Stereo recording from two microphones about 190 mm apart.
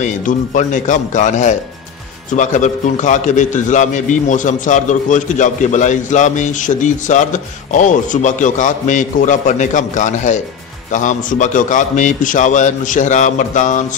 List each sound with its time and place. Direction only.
0.0 s a man's voice: 40° left (ahead or behind)